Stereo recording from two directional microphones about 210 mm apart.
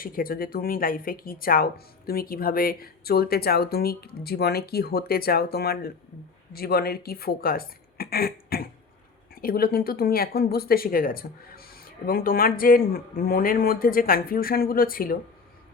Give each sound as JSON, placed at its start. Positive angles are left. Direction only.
{"t": 0.0, "sound": "a woman's voice", "side_deg": 45}